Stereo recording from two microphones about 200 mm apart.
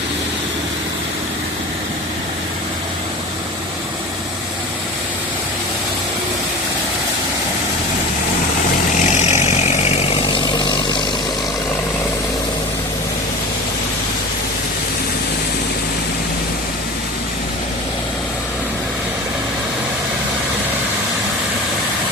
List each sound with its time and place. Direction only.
9.1 s vehicle: 35° left (ahead or behind)
10.3 s vehicle: 20° left (ahead or behind)